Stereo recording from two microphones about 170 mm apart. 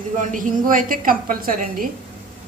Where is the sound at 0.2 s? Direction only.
50° right (ahead or behind).